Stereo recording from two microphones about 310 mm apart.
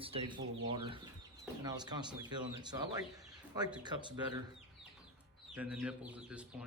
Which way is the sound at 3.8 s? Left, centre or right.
Centre.